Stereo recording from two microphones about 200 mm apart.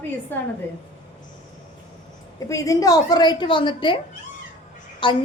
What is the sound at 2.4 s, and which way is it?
A woman's voice, 15° left (ahead or behind).